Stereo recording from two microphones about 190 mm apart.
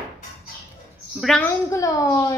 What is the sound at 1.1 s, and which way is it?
Speech, centre (ahead or behind).